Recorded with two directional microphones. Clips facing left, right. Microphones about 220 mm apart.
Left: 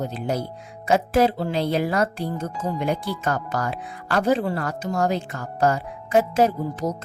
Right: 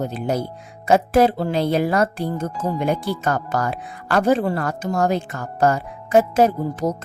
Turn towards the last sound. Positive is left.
turn(degrees=-50)  # may be behind; listen again after turning